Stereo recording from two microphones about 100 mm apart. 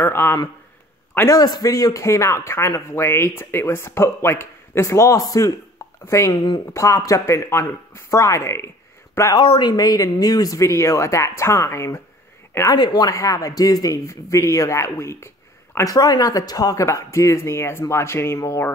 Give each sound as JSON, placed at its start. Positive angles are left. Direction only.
{"t": 0.0, "sound": "speech", "side_deg": 25}
{"t": 1.3, "sound": "speech", "side_deg": 40}
{"t": 6.6, "sound": "speech", "side_deg": 30}
{"t": 9.3, "sound": "speech", "side_deg": 50}
{"t": 12.7, "sound": "speech", "side_deg": 45}